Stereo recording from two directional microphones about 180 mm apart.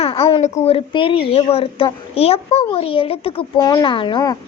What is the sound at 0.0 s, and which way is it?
A woman's voice, 30° left (ahead or behind).